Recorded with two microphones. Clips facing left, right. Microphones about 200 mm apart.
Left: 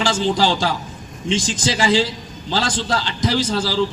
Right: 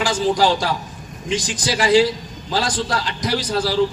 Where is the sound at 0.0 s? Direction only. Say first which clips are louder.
Right 1 dB; 25° left (ahead or behind).